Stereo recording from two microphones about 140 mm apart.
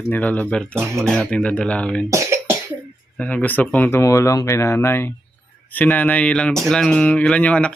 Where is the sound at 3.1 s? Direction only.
10° left (ahead or behind).